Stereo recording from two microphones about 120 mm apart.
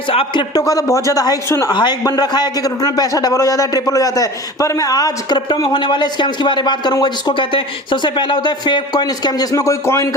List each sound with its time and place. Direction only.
0.1 s a man's voice: 50° left (ahead or behind)
0.5 s speech: 30° left (ahead or behind)
1.7 s a man's voice: 35° left (ahead or behind)